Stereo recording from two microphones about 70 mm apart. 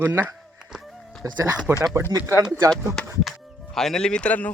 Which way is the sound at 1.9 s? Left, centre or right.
Right.